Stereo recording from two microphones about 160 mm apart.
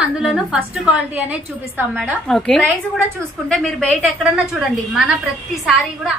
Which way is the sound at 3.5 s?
5° left (ahead or behind).